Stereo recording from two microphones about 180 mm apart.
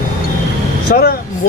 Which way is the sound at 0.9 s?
60° left (ahead or behind).